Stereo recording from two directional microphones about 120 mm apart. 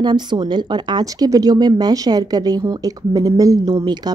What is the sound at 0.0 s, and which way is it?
Speech, 40° right (ahead or behind).